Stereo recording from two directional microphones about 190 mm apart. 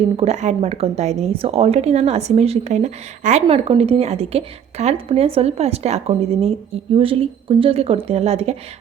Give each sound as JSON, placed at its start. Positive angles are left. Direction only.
{"t": 0.2, "sound": "a woman's voice", "side_deg": -35}